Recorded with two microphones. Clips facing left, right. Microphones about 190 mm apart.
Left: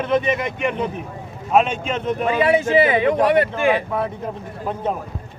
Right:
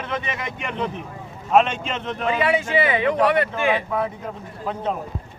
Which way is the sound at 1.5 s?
10° left (ahead or behind).